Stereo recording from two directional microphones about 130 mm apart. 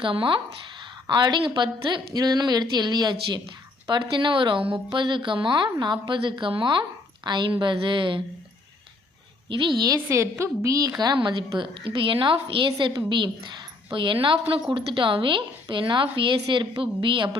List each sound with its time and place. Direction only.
0.0 s a woman's voice: 40° right (ahead or behind)
9.5 s a woman's voice: 40° right (ahead or behind)
10.1 s a woman's voice: 20° right (ahead or behind); by 17.3 s 40° right (ahead or behind)